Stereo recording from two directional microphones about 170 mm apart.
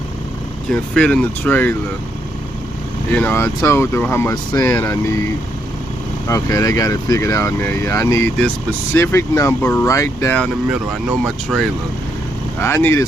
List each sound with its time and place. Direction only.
0.7 s speech: 5° left (ahead or behind)
3.1 s speech: 10° left (ahead or behind)
6.2 s speech: 20° left (ahead or behind); by 11.7 s centre (ahead or behind)
12.5 s speech: 15° left (ahead or behind)